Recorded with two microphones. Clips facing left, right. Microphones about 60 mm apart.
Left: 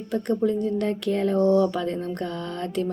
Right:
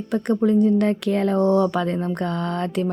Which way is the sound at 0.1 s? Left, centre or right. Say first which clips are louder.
Right 4 dB; right.